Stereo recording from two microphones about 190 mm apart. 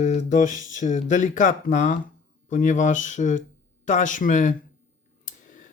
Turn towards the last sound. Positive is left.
turn(degrees=45)  # may be behind; listen again after turning